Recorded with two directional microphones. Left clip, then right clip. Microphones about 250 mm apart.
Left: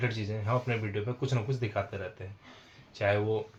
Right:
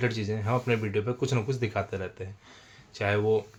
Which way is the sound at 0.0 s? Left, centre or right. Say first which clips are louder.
Right 4 dB; right.